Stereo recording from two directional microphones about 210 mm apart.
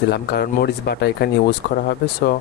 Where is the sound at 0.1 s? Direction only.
50° left (ahead or behind).